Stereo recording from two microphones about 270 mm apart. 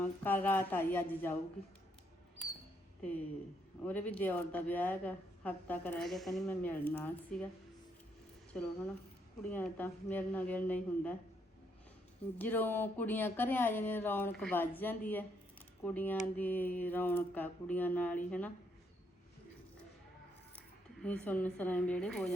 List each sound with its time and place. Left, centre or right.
0.0 s a woman's voice: centre
3.8 s a woman's voice: centre
8.5 s a woman's voice: centre
12.4 s a woman's voice: centre
21.0 s speech: centre